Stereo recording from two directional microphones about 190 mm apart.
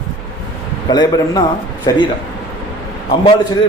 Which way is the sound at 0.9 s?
20° left (ahead or behind).